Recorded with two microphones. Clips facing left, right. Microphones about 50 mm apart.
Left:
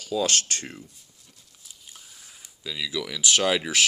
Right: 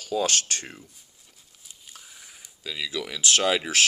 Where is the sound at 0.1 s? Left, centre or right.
Right.